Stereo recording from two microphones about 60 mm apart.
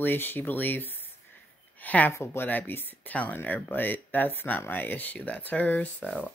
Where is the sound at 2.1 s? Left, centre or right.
Left.